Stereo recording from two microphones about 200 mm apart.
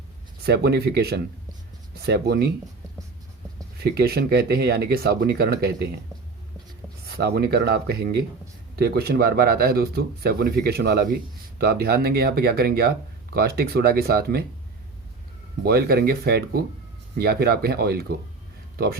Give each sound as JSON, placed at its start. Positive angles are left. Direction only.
{"t": 0.4, "sound": "speech", "side_deg": -55}
{"t": 3.8, "sound": "speech", "side_deg": -50}
{"t": 7.2, "sound": "speech", "side_deg": -55}
{"t": 15.6, "sound": "speech", "side_deg": -50}